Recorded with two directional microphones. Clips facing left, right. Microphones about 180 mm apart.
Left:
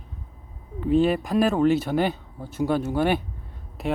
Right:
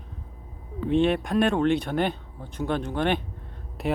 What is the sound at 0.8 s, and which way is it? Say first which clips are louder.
Speech: left 2 dB; 5° left (ahead or behind).